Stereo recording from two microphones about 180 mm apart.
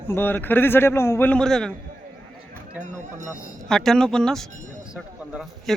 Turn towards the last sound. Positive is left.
turn(degrees=-45)  # may be behind; listen again after turning